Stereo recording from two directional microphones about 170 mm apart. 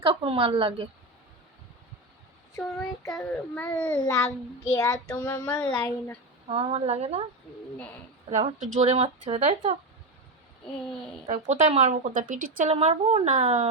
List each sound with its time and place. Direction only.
0.0 s speech: 30° right (ahead or behind)
2.6 s speech: 15° left (ahead or behind)
6.5 s speech: 35° right (ahead or behind)
8.3 s speech: 45° right (ahead or behind)
11.3 s speech: 45° right (ahead or behind)
12.7 s speech: 40° right (ahead or behind)